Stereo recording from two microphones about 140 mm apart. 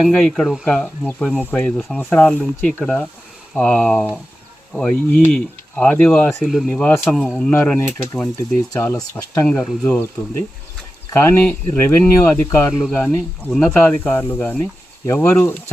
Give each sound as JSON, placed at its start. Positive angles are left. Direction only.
{"t": 0.0, "sound": "speech", "side_deg": 5}
{"t": 6.7, "sound": "speech", "side_deg": 10}
{"t": 9.5, "sound": "speech", "side_deg": 5}